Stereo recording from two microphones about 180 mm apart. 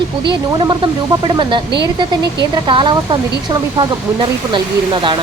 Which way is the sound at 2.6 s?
25° right (ahead or behind).